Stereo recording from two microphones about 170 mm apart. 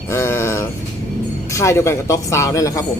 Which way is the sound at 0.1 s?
15° left (ahead or behind).